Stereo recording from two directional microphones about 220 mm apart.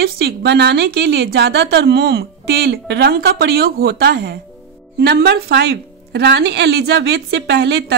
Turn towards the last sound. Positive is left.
turn(degrees=-50)  # may be behind; listen again after turning